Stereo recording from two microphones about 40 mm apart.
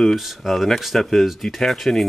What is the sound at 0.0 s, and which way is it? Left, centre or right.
Speech, centre.